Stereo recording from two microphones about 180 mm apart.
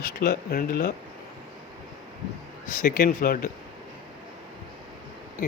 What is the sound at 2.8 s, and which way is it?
Speech, 60° left (ahead or behind).